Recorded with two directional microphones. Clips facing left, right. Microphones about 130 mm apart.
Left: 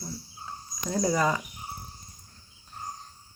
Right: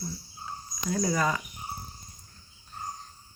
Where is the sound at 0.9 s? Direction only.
30° left (ahead or behind).